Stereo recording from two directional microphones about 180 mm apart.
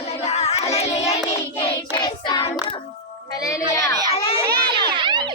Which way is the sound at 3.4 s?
15° left (ahead or behind).